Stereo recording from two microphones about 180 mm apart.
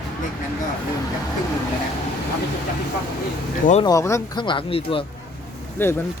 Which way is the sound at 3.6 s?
40° left (ahead or behind).